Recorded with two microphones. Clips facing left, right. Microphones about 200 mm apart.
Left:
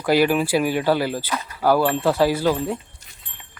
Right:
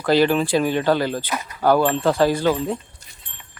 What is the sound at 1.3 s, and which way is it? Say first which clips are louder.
Speech: even; 15° right (ahead or behind).